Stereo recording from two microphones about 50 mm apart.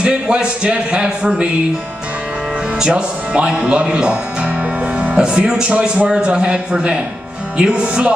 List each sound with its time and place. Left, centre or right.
0.0 s a man's voice: centre
2.8 s a man's voice: centre